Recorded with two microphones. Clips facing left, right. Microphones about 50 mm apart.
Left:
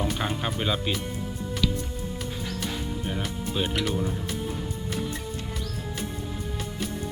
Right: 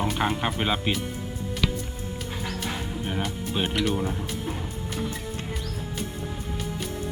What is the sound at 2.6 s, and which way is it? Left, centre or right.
Music, right.